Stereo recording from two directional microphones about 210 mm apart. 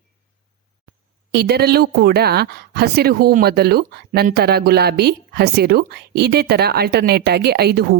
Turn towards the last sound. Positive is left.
turn(degrees=-50)  # may be behind; listen again after turning